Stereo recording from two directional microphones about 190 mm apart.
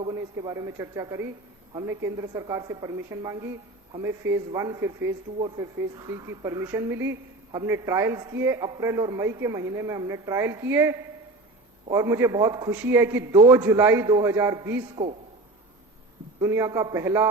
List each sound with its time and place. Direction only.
0.0 s a woman's voice: 20° right (ahead or behind)
15.0 s a man's voice: 25° right (ahead or behind)
16.4 s a woman's voice: 15° right (ahead or behind)